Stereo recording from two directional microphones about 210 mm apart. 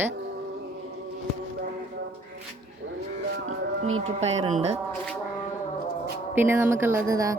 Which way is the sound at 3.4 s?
75° right (ahead or behind).